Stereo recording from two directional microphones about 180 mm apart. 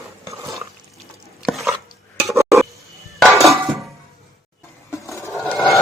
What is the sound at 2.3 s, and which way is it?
Stir, 15° right (ahead or behind).